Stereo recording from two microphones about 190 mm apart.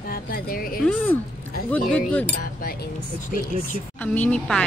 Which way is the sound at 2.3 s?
50° left (ahead or behind).